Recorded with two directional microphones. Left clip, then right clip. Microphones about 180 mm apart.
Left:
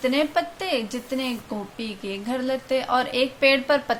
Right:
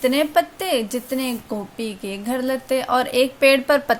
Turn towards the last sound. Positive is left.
turn(degrees=-40)  # may be behind; listen again after turning